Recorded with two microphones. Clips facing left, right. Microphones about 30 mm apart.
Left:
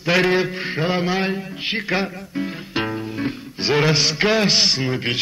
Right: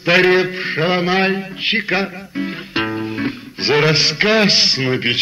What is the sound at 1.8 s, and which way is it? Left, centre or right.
Speech, centre.